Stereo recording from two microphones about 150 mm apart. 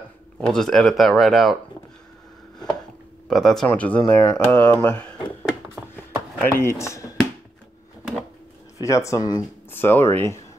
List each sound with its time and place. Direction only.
0.5 s speech: 5° left (ahead or behind)
3.3 s speech: centre (ahead or behind)
5.9 s a sound: 15° left (ahead or behind)
8.8 s speech: 20° left (ahead or behind)
9.7 s speech: 15° left (ahead or behind)